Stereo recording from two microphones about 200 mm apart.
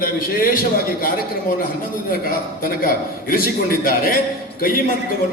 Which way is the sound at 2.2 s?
45° left (ahead or behind).